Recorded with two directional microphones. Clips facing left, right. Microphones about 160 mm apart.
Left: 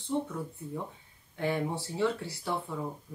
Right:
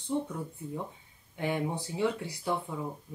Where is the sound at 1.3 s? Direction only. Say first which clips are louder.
Left 1 dB; 15° right (ahead or behind).